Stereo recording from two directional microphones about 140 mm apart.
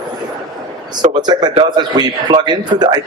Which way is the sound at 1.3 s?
30° right (ahead or behind).